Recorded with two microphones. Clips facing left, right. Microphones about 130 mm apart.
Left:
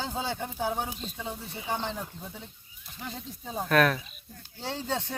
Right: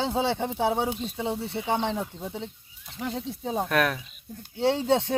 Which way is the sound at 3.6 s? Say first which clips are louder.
Left 3 dB; 5° right (ahead or behind).